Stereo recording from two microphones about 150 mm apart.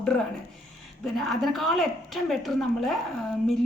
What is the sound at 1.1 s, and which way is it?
A woman's voice, centre (ahead or behind).